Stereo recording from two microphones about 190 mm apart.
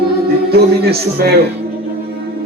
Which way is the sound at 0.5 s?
55° right (ahead or behind).